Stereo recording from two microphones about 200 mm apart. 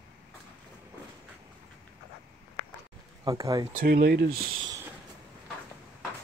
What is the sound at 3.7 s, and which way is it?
Speech, 50° right (ahead or behind).